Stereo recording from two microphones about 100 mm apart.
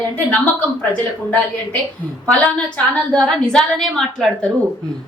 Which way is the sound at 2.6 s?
10° left (ahead or behind).